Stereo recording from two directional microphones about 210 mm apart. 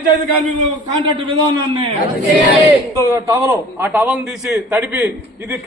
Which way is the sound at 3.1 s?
10° right (ahead or behind).